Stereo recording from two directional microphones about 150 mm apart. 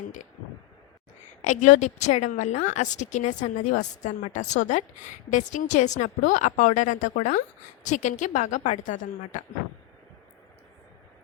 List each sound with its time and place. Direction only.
1.4 s a woman's voice: 55° left (ahead or behind)